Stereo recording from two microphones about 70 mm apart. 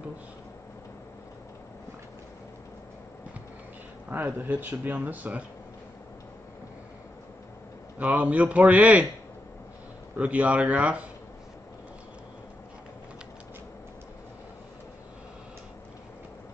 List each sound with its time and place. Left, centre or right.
4.1 s speech: right
8.0 s speech: right
10.1 s speech: right